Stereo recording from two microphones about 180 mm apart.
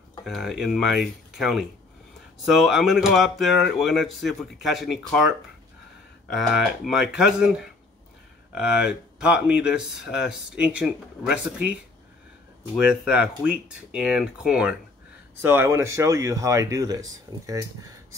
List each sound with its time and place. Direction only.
0.2 s speech: centre (ahead or behind)
6.5 s speech: 5° right (ahead or behind)
12.7 s speech: 5° right (ahead or behind)